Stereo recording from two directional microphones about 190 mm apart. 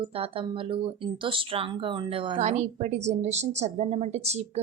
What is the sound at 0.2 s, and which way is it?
A woman's voice, 30° right (ahead or behind).